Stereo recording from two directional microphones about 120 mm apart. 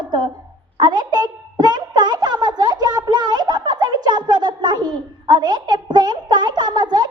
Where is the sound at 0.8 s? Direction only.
40° right (ahead or behind).